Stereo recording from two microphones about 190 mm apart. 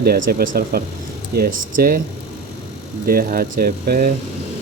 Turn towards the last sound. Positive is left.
turn(degrees=-50)  # may be behind; listen again after turning